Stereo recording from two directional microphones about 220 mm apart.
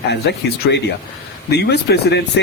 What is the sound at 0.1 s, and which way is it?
Speech, 50° left (ahead or behind).